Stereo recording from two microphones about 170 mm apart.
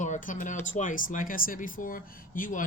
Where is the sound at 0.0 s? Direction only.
50° left (ahead or behind).